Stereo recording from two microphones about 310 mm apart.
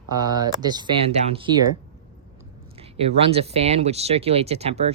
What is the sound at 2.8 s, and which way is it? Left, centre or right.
Speech, centre.